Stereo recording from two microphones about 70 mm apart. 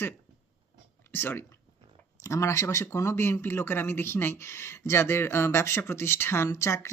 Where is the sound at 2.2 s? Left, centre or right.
Left.